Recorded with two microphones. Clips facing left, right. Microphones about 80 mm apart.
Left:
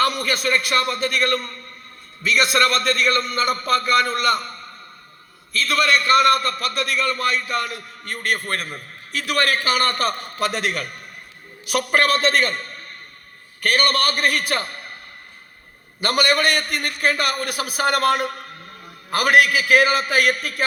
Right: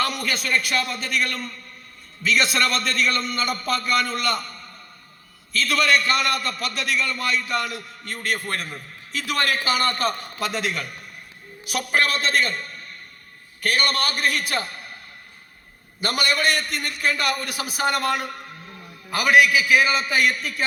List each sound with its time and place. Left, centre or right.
0.2 s a man's voice: left
5.5 s a man's voice: left
16.0 s a man's voice: left